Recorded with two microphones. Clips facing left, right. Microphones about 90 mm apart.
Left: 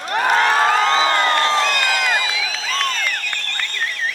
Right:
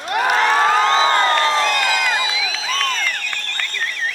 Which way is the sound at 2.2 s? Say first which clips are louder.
Right 1 dB; 20° right (ahead or behind).